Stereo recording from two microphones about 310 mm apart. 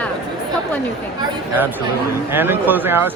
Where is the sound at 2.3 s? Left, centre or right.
Centre.